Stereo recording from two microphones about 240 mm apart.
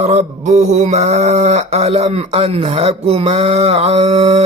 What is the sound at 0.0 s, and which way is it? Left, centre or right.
Speech, right.